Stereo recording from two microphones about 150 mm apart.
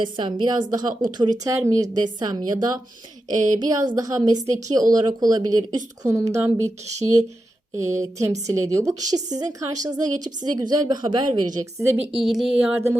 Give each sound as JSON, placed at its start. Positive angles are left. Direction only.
{"t": 0.0, "sound": "a woman's voice", "side_deg": -30}
{"t": 10.6, "sound": "a woman's voice", "side_deg": -30}
{"t": 12.2, "sound": "speech", "side_deg": 0}